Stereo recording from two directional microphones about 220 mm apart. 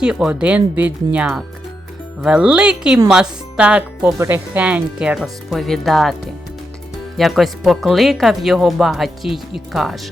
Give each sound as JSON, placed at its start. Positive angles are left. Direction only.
{"t": 0.0, "sound": "speech", "side_deg": -5}
{"t": 7.2, "sound": "speech", "side_deg": 0}